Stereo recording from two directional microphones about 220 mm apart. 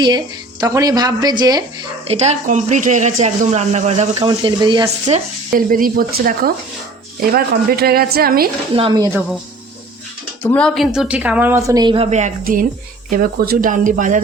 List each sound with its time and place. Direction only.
0.6 s a woman's voice: 15° right (ahead or behind)
2.0 s speech: 30° right (ahead or behind)
4.1 s speech: 20° right (ahead or behind)
5.0 s a woman's voice: 35° right (ahead or behind)
8.7 s speech: 20° right (ahead or behind)
10.4 s a woman's voice: 5° left (ahead or behind); by 14.2 s 35° right (ahead or behind)